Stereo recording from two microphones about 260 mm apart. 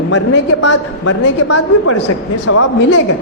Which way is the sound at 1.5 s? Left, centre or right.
Left.